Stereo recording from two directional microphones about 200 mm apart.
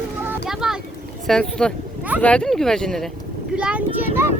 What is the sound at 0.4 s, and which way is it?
Boat, centre (ahead or behind).